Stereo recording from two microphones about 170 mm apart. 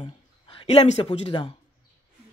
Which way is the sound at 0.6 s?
40° left (ahead or behind).